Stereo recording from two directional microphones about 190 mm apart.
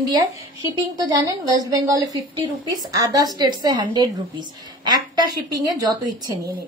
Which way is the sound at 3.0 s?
20° right (ahead or behind).